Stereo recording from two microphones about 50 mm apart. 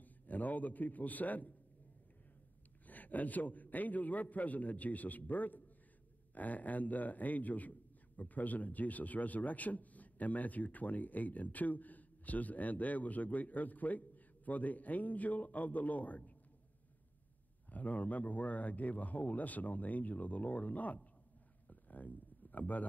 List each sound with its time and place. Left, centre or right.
0.0 s a man's voice: left
2.9 s a man's voice: left
17.6 s a man's voice: left
21.6 s a sound: left